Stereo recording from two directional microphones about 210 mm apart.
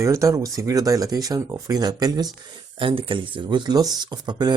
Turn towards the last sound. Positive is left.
turn(degrees=-20)  # may be behind; listen again after turning